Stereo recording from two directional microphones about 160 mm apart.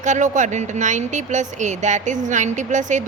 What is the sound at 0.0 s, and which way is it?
Speech, 50° right (ahead or behind).